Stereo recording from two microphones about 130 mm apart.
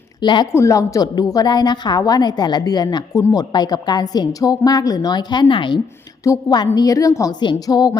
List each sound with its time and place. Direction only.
0.2 s speech: 35° left (ahead or behind)
0.5 s a woman's voice: 25° left (ahead or behind)